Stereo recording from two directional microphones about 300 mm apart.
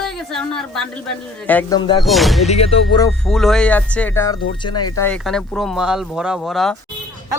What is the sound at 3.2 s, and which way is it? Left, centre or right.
Speech, centre.